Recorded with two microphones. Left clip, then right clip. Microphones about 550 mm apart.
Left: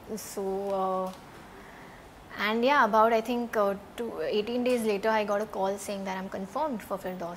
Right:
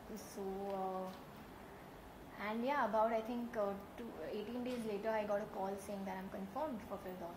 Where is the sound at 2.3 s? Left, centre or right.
Left.